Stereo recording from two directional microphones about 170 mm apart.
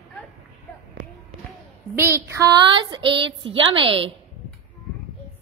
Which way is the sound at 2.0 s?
15° right (ahead or behind).